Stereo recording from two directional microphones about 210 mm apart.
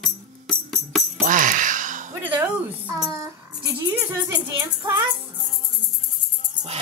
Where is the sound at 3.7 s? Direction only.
10° right (ahead or behind).